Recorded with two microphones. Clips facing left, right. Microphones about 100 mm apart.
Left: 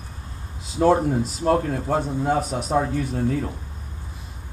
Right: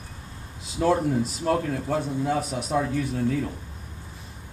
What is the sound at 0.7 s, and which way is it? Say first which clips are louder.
A man's voice: left 4 dB; 35° left (ahead or behind).